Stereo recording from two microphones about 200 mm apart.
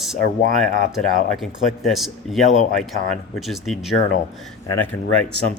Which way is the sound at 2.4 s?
35° left (ahead or behind).